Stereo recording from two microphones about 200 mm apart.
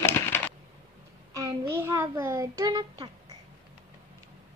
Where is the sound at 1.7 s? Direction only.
15° right (ahead or behind).